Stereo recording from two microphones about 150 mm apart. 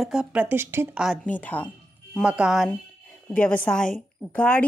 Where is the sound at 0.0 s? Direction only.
5° right (ahead or behind).